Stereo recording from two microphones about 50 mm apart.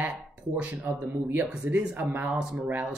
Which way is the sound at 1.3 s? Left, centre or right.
Right.